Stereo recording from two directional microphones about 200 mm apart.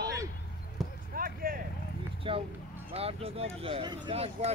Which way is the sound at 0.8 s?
Centre (ahead or behind).